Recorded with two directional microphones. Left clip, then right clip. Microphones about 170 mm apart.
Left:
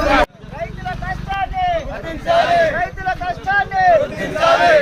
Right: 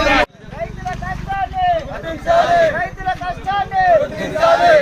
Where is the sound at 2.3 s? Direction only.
10° right (ahead or behind).